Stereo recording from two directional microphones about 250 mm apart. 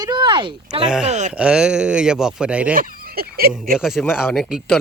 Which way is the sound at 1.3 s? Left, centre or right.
Centre.